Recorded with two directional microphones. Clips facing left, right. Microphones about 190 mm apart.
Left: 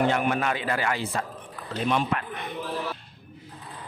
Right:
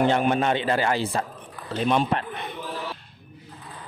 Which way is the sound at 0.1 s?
30° right (ahead or behind).